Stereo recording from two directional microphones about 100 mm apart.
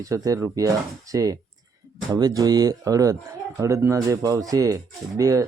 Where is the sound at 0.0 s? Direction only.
35° right (ahead or behind).